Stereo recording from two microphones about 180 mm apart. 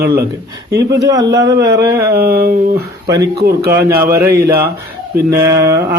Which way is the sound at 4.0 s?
15° right (ahead or behind).